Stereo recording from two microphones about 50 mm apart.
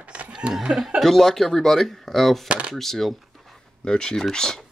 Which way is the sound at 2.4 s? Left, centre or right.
Right.